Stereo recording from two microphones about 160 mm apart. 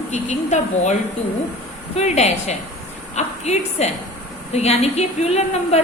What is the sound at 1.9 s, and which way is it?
A woman's voice, 45° left (ahead or behind).